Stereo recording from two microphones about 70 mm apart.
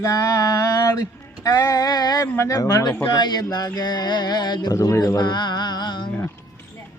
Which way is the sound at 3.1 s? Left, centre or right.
Left.